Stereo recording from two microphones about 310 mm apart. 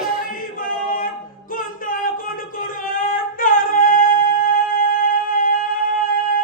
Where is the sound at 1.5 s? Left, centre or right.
Left.